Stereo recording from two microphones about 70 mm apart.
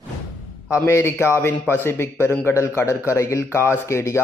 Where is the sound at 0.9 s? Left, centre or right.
Left.